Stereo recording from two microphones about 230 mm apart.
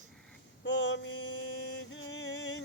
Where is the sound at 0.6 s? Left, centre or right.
Left.